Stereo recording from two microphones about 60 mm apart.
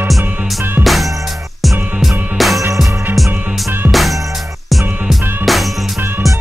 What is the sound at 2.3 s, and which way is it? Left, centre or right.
Music, centre.